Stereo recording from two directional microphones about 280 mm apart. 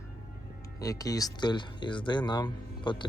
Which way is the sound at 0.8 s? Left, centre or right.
Centre.